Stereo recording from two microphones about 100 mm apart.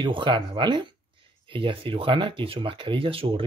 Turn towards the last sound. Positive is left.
turn(degrees=-65)  # may be behind; listen again after turning